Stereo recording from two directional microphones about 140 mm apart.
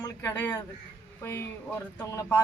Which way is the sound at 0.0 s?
20° left (ahead or behind).